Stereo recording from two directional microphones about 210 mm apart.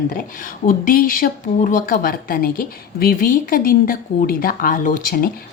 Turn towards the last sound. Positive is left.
turn(degrees=45)  # may be behind; listen again after turning